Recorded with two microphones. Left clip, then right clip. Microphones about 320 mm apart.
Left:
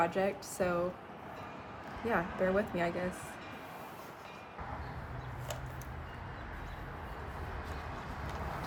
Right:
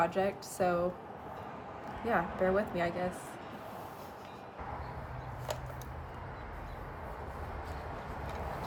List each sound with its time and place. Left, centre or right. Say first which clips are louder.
0.0 s a woman's voice: right 1 dB; centre
2.0 s a woman's voice: right 2 dB; centre